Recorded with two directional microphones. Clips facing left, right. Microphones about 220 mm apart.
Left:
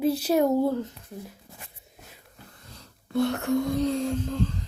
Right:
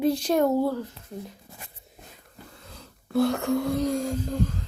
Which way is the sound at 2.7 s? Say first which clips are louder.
Right 2 dB; centre (ahead or behind).